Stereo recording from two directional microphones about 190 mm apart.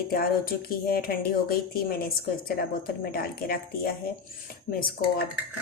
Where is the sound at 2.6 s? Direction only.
50° left (ahead or behind).